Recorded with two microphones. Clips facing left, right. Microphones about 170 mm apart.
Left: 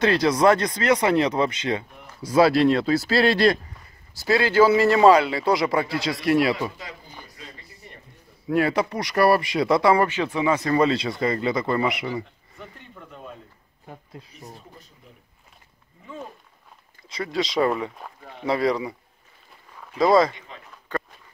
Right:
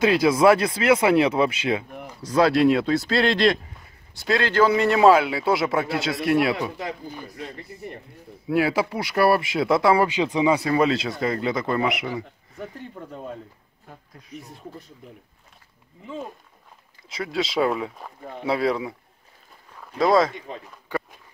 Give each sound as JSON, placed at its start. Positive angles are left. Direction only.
{"t": 0.0, "sound": "speech", "side_deg": -5}
{"t": 2.2, "sound": "a man's voice", "side_deg": 5}
{"t": 6.8, "sound": "speech", "side_deg": -60}
{"t": 8.5, "sound": "a man's voice", "side_deg": -5}
{"t": 10.0, "sound": "a man's voice", "side_deg": -15}
{"t": 12.9, "sound": "speech", "side_deg": -35}
{"t": 14.2, "sound": "speech", "side_deg": 25}
{"t": 17.1, "sound": "a man's voice", "side_deg": 0}